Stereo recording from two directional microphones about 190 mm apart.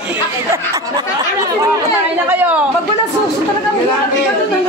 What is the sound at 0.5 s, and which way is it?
Speech, 15° right (ahead or behind).